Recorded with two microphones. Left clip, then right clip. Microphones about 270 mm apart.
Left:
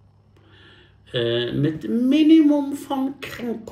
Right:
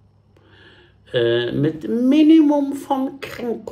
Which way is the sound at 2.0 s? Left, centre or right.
Centre.